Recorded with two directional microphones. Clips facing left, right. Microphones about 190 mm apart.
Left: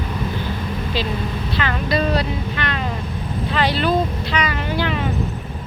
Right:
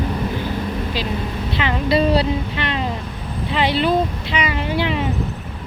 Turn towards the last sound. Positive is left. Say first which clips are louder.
# right 1 dB
turn(degrees=-20)  # may be behind; listen again after turning